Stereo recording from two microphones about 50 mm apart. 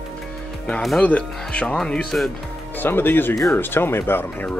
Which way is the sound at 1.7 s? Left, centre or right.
Centre.